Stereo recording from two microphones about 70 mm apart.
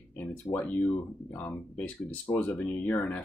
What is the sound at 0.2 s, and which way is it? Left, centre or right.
Speech, left.